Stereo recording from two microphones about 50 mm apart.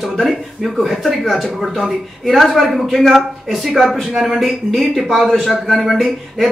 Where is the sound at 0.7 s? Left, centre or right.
Centre.